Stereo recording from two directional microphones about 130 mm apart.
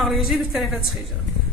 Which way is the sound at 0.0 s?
Centre (ahead or behind).